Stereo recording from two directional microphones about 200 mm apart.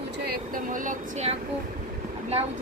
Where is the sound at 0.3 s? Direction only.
45° right (ahead or behind).